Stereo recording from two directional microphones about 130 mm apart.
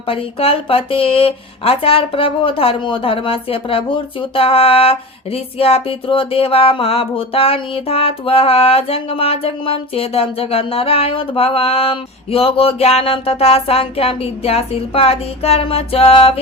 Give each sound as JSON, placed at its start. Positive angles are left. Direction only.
{"t": 0.1, "sound": "speech", "side_deg": 45}